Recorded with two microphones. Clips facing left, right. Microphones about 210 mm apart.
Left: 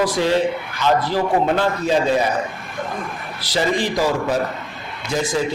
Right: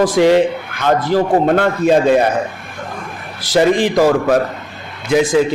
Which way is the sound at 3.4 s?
50° right (ahead or behind).